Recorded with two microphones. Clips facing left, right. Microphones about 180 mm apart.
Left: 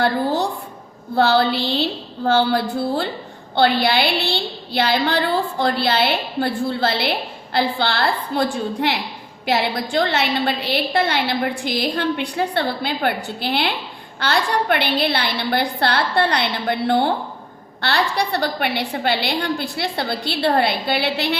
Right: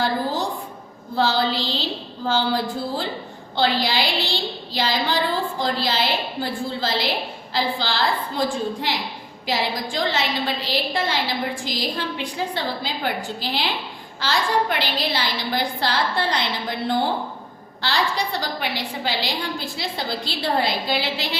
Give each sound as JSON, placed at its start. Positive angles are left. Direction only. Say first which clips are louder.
{"t": 1.1, "sound": "a woman's voice", "louder": "left 5 dB", "side_deg": 60}